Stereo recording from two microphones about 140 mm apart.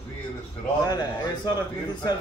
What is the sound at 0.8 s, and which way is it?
Speech, 30° left (ahead or behind).